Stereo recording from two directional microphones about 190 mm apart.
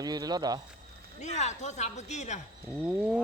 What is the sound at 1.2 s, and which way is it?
Speech, 40° left (ahead or behind).